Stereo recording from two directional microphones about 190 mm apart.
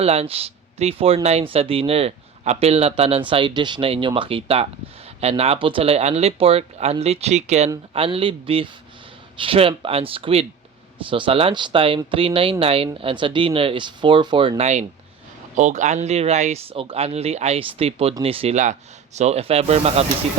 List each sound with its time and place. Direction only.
0.0 s speech: 30° right (ahead or behind)